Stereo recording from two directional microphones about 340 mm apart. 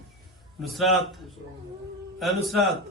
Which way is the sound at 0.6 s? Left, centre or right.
Centre.